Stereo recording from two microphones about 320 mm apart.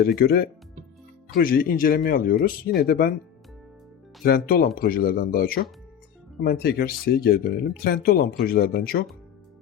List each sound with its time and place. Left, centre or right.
0.0 s speech: left
4.2 s speech: left